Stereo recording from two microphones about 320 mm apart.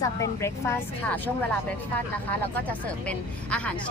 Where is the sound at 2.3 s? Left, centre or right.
Centre.